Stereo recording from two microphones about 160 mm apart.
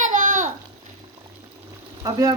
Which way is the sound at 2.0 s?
25° right (ahead or behind).